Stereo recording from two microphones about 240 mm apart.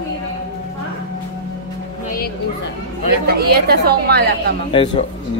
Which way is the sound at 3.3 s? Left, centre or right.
Right.